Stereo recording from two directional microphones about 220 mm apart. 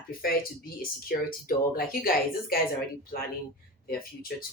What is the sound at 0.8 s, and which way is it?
Speech, 40° left (ahead or behind).